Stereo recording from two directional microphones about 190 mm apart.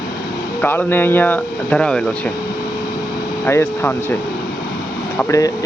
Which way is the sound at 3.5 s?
10° left (ahead or behind).